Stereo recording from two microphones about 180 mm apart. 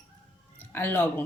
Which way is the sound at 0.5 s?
10° left (ahead or behind).